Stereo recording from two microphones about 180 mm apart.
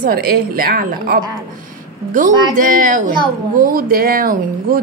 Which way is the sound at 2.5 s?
50° right (ahead or behind).